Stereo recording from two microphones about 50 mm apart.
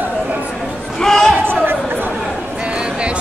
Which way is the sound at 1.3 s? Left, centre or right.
Right.